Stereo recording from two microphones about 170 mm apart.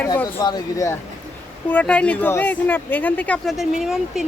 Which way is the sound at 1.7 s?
5° left (ahead or behind).